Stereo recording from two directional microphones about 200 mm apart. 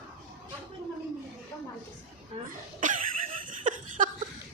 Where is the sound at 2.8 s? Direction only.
40° right (ahead or behind).